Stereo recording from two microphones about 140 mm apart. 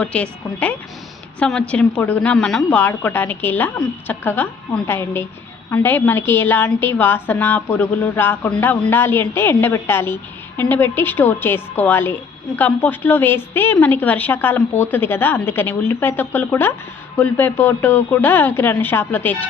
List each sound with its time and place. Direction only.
0.0 s a woman's voice: 10° left (ahead or behind)